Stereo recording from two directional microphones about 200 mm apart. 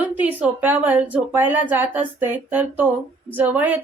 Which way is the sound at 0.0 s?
10° right (ahead or behind).